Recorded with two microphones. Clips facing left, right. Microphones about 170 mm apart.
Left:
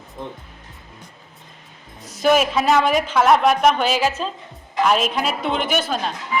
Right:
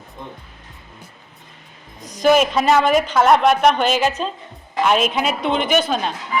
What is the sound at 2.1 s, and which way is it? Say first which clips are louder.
A woman's voice: right 2 dB; 5° left (ahead or behind).